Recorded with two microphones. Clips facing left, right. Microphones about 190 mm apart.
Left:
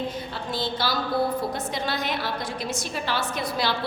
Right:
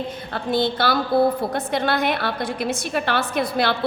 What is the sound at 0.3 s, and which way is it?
A woman's voice, 60° right (ahead or behind).